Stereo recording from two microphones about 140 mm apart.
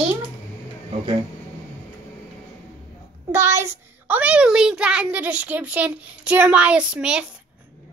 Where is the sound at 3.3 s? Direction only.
20° right (ahead or behind).